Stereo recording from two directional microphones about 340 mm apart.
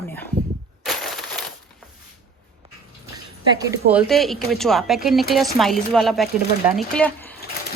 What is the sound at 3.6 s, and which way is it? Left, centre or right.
Speech, centre.